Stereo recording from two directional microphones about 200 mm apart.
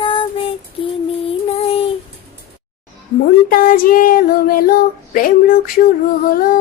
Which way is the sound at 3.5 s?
45° left (ahead or behind).